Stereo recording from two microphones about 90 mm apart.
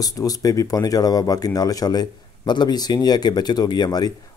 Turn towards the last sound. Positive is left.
turn(degrees=50)  # may be behind; listen again after turning